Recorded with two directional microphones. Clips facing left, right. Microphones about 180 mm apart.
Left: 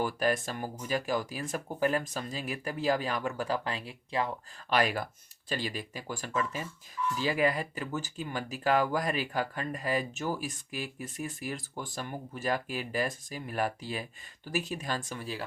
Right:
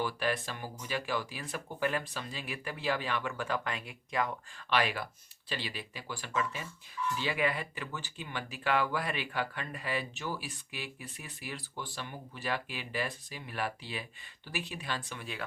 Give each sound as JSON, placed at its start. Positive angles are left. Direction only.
{"t": 0.0, "sound": "speech", "side_deg": 45}
{"t": 4.8, "sound": "speech", "side_deg": 40}